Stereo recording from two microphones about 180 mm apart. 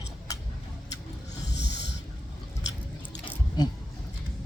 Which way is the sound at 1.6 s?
75° left (ahead or behind).